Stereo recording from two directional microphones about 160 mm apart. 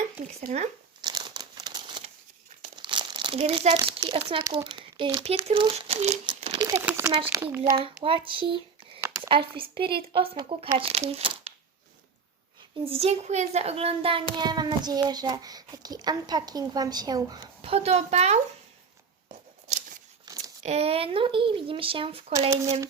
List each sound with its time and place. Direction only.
0.5 s speech: 50° right (ahead or behind)
1.0 s crumpling: 25° right (ahead or behind)
2.7 s speech: 30° right (ahead or behind)
6.8 s a child's voice: 15° right (ahead or behind)
7.9 s speech: 35° right (ahead or behind)
9.0 s a sound: 20° right (ahead or behind)
9.3 s speech: 35° right (ahead or behind)
12.8 s a child's voice: 40° right (ahead or behind)
17.6 s speech: 40° right (ahead or behind)
20.6 s speech: 40° right (ahead or behind)